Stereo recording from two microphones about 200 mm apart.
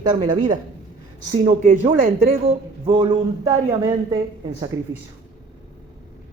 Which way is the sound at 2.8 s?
25° right (ahead or behind).